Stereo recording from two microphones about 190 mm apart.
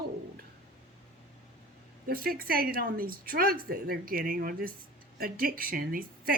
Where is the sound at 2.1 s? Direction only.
50° right (ahead or behind).